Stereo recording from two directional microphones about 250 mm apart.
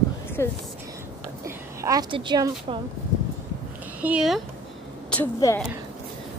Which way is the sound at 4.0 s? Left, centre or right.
Centre.